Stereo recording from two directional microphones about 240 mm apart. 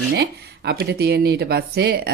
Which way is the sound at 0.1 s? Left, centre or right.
Right.